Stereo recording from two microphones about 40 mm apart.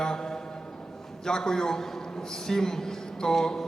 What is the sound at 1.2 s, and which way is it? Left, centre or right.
A man's voice, centre.